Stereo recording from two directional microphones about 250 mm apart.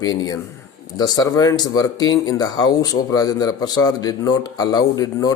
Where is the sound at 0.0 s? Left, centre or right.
Centre.